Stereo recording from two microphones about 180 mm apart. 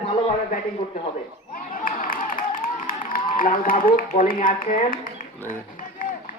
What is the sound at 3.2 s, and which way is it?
A man's voice, 50° left (ahead or behind).